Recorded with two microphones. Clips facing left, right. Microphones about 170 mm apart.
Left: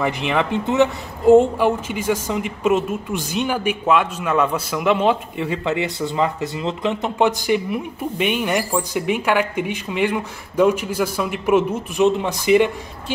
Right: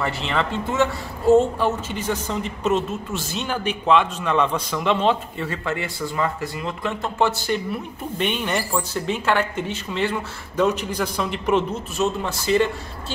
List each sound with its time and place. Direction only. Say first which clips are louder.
0.0 s speech: left 4 dB; 15° left (ahead or behind)